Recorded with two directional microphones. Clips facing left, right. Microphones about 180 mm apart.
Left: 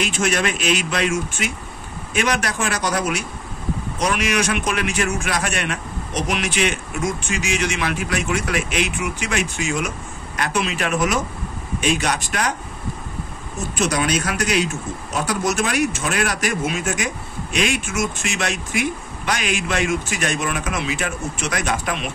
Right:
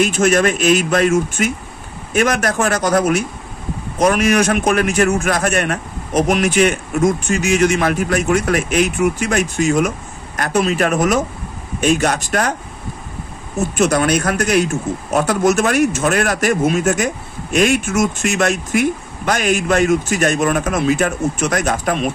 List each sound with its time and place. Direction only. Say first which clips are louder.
0.0 s speech: right 7 dB; 45° right (ahead or behind)
13.7 s speech: right 5 dB; 55° right (ahead or behind)